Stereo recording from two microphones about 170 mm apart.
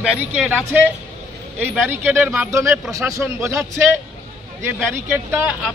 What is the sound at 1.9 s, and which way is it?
Speech, 10° right (ahead or behind).